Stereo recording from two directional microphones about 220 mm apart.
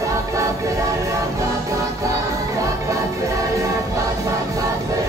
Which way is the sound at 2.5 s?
15° right (ahead or behind).